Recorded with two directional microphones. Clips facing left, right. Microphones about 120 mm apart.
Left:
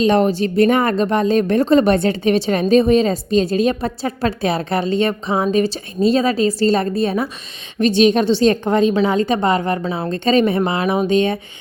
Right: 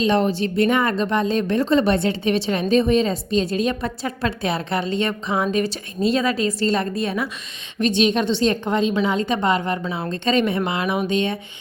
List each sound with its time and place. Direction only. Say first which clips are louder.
0.0 s a woman's voice: left 4 dB; 45° left (ahead or behind)